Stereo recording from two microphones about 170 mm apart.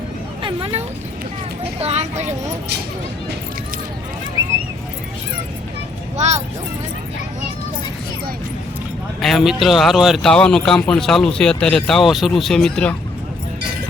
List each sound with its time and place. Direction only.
0.4 s a sound: 35° right (ahead or behind)
1.8 s speech: 40° right (ahead or behind)
6.1 s speech: 40° right (ahead or behind)
9.2 s speech: centre (ahead or behind)